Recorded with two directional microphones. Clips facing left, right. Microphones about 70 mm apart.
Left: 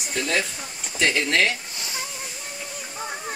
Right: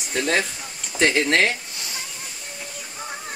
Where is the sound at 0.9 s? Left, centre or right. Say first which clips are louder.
Right 3 dB; right.